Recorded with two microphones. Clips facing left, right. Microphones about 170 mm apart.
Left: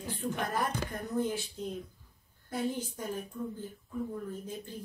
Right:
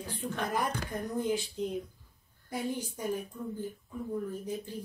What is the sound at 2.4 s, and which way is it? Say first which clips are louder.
Speech: left 1 dB; 15° right (ahead or behind).